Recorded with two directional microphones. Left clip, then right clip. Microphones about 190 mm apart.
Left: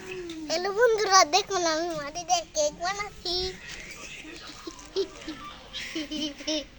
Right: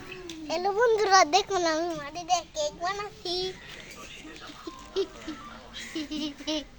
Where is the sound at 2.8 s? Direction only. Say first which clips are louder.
Left 1 dB; 10° right (ahead or behind).